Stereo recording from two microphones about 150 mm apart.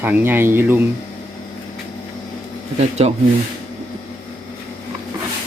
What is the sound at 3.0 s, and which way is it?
Speech, 45° right (ahead or behind).